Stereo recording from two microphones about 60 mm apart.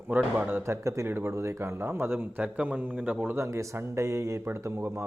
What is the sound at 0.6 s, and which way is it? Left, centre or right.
Speech, right.